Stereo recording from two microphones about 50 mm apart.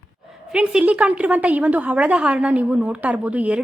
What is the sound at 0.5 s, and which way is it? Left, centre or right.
A woman's voice, centre.